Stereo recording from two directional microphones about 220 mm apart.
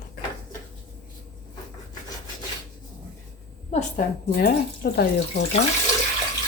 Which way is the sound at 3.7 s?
40° left (ahead or behind).